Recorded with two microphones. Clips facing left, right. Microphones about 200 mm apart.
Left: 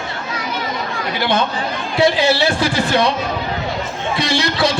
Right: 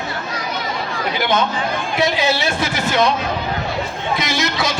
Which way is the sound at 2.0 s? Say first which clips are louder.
Left 5 dB; 30° left (ahead or behind).